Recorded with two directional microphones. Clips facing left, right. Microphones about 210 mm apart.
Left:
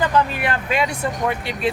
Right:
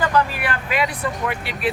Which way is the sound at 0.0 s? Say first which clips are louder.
Left 1 dB; 20° left (ahead or behind).